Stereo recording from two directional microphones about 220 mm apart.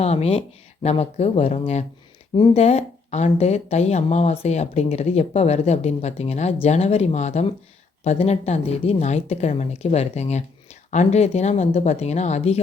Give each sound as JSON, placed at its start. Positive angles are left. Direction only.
{"t": 0.0, "sound": "speech", "side_deg": 30}